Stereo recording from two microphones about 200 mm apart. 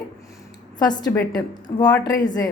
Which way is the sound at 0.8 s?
20° left (ahead or behind).